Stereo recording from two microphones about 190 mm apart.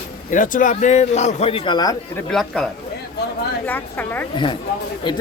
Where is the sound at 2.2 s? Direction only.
5° left (ahead or behind).